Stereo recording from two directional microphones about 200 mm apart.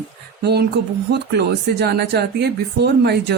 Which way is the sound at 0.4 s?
55° right (ahead or behind).